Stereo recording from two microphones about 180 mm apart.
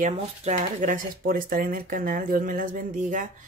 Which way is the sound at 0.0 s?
40° right (ahead or behind).